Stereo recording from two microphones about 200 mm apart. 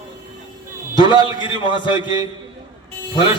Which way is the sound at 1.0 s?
20° right (ahead or behind).